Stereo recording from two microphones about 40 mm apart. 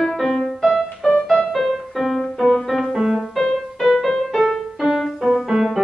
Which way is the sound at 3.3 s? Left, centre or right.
Centre.